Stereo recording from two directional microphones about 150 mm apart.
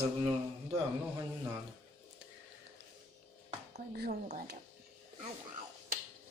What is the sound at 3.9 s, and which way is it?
Speech, 90° right.